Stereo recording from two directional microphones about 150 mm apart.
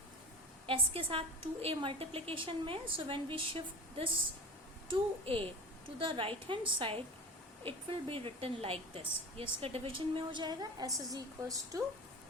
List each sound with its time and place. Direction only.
0.7 s a woman's voice: 35° right (ahead or behind)